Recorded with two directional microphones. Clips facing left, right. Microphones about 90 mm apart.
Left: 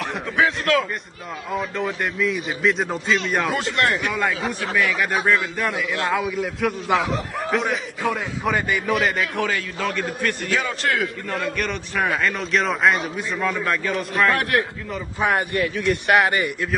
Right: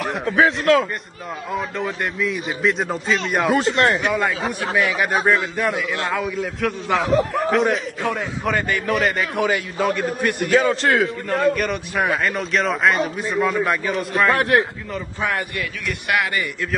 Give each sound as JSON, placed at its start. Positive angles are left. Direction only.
{"t": 0.4, "sound": "a man's voice", "side_deg": -35}
{"t": 1.8, "sound": "a man's voice", "side_deg": 0}
{"t": 3.5, "sound": "a man's voice", "side_deg": -30}
{"t": 5.6, "sound": "a man's voice", "side_deg": 0}
{"t": 9.4, "sound": "a man's voice", "side_deg": -15}
{"t": 10.5, "sound": "a man's voice", "side_deg": -35}
{"t": 11.2, "sound": "a man's voice", "side_deg": 0}
{"t": 14.3, "sound": "a man's voice", "side_deg": -30}
{"t": 15.1, "sound": "a man's voice", "side_deg": 20}